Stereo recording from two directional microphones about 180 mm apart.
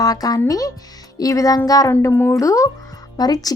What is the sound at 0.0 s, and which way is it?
A woman's voice, 20° left (ahead or behind).